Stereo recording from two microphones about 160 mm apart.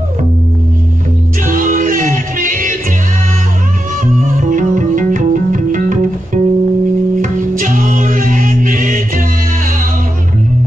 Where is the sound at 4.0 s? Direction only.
55° right (ahead or behind).